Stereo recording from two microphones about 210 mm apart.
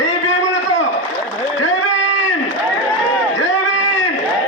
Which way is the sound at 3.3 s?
65° left (ahead or behind).